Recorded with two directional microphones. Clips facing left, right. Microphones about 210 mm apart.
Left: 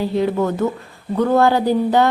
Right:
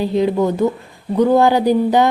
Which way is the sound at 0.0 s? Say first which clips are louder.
Right 2 dB; 15° right (ahead or behind).